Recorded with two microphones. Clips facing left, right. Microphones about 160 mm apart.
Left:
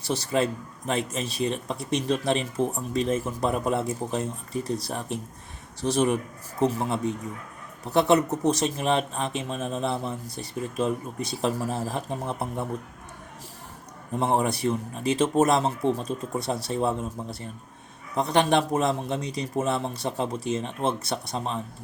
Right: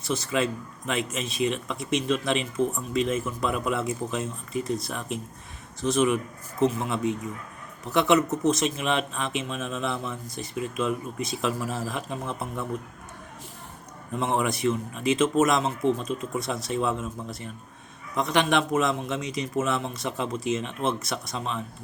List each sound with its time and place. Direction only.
0.0 s speech: 35° left (ahead or behind)
14.1 s speech: 35° left (ahead or behind)